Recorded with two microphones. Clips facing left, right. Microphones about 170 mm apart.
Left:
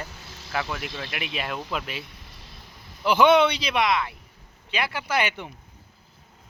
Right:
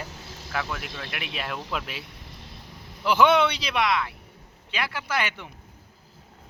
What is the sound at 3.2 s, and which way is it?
Speech, 5° right (ahead or behind).